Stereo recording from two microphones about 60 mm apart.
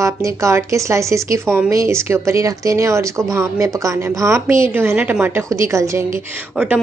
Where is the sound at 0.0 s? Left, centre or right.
Right.